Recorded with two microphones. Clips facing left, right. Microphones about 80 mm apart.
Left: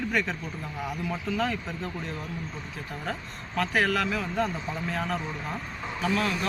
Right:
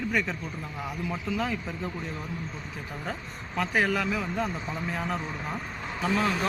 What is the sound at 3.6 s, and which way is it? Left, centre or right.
Speech, centre.